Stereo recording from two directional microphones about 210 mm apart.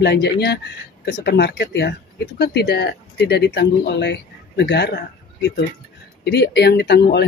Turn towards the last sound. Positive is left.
turn(degrees=50)  # may be behind; listen again after turning